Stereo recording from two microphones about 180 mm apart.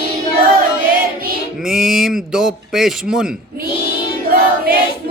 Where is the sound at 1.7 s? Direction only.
Centre (ahead or behind).